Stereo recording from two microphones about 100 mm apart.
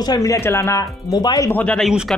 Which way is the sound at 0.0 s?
40° left (ahead or behind).